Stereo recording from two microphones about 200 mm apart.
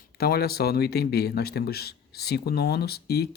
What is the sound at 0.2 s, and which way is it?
A man's voice, 50° left (ahead or behind).